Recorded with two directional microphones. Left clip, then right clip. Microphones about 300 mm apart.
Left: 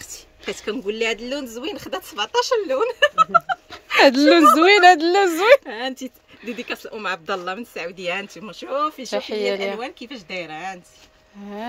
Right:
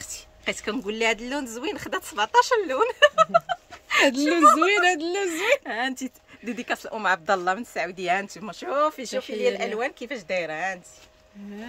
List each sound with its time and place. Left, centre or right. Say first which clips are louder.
0.0 s speech: right 1 dB; centre
5.7 s speech: even; centre
9.2 s speech: left 1 dB; centre
9.8 s speech: right 3 dB; centre